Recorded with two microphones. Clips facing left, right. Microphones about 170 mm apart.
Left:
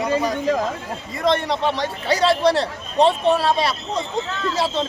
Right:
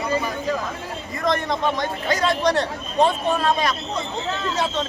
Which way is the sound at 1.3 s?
30° left (ahead or behind).